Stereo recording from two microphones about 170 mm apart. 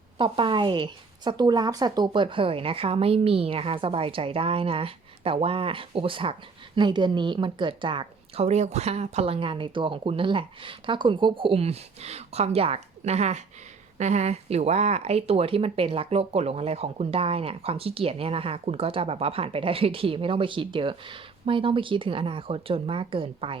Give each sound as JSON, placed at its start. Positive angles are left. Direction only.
{"t": 0.2, "sound": "speech", "side_deg": -30}